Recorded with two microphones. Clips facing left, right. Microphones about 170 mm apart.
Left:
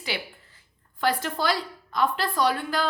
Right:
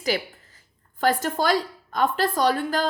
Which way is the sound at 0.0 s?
40° right (ahead or behind).